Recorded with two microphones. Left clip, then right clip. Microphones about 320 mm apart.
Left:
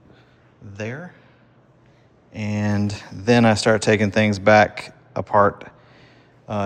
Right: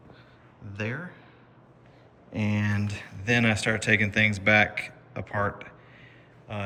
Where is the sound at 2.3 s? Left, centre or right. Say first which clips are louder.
Left 4 dB; centre.